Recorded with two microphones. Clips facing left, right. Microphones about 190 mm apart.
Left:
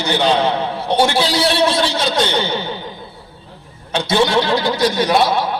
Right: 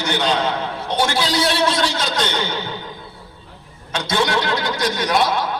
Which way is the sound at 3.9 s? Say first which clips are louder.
Left 4 dB; 30° left (ahead or behind).